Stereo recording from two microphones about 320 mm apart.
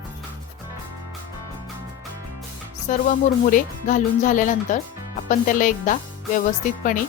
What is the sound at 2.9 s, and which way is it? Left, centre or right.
Speech, left.